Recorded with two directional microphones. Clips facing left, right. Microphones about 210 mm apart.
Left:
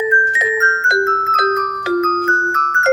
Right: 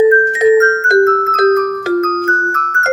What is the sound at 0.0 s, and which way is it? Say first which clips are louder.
Music: right 11 dB; 45° right (ahead or behind).